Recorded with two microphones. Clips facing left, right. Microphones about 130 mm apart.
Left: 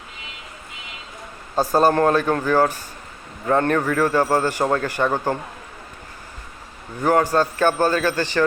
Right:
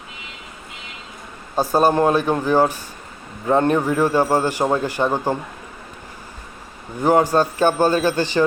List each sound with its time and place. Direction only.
1.5 s a man's voice: 15° right (ahead or behind)
7.0 s a man's voice: 20° right (ahead or behind)